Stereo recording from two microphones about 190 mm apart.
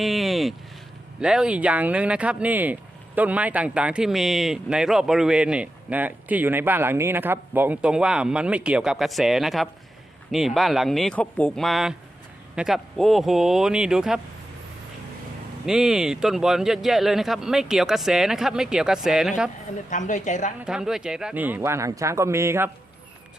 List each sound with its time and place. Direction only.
0.0 s a sound: centre (ahead or behind)
1.2 s speech: 5° right (ahead or behind)
15.6 s speech: 5° right (ahead or behind)
19.9 s speech: 40° left (ahead or behind)
20.6 s speech: 5° right (ahead or behind)